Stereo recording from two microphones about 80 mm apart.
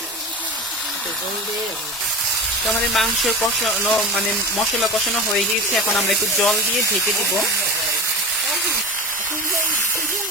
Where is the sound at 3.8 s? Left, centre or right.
Centre.